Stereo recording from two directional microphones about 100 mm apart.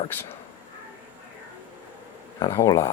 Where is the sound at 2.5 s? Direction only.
25° left (ahead or behind).